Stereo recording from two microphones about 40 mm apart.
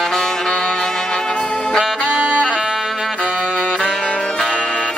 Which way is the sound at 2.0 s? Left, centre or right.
Right.